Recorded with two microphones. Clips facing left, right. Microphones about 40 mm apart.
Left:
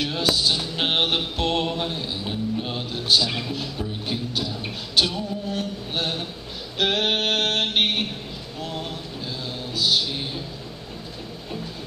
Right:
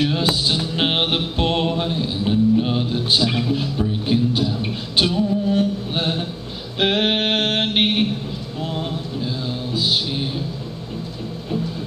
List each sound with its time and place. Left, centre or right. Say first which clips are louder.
0.0 s music: right 3 dB; right